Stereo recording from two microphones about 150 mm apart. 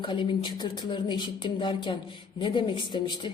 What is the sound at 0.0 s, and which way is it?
A woman's voice, 35° left (ahead or behind).